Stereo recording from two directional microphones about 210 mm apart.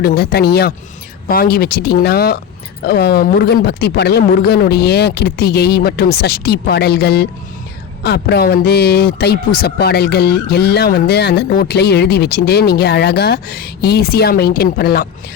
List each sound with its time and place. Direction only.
0.0 s speech: 45° left (ahead or behind)